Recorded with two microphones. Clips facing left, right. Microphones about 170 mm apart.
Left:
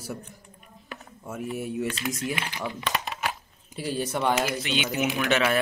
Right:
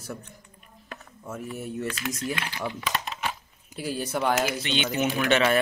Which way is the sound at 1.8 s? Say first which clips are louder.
Left 1 dB; 25° left (ahead or behind).